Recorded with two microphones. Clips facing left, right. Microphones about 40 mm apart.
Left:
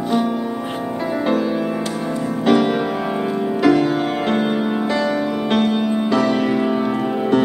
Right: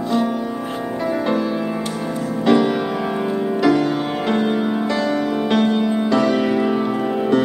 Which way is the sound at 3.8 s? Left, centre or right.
Centre.